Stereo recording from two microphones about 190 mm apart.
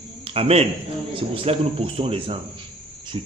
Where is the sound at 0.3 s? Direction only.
30° right (ahead or behind).